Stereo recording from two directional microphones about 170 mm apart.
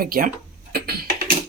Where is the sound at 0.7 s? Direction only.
65° right (ahead or behind).